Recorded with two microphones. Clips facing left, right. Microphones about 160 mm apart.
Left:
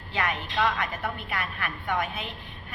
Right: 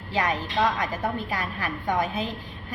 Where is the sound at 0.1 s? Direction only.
35° right (ahead or behind).